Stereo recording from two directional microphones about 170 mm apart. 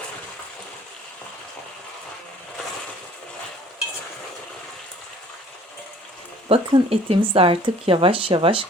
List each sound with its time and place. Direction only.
6.5 s speech: 35° right (ahead or behind)